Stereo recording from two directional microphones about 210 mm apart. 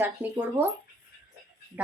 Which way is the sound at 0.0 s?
10° right (ahead or behind).